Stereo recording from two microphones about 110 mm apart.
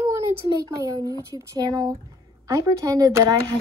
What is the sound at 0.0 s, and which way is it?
Speech, 25° right (ahead or behind).